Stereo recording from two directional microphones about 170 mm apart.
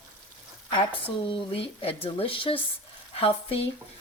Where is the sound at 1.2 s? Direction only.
30° left (ahead or behind).